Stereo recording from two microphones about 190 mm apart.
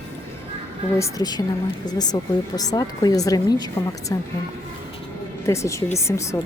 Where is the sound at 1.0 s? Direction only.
20° left (ahead or behind).